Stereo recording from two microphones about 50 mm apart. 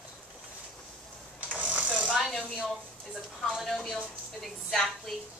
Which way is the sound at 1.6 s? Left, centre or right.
Right.